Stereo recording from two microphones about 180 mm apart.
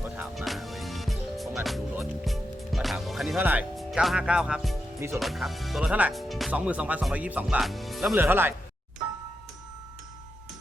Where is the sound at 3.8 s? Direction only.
Centre (ahead or behind).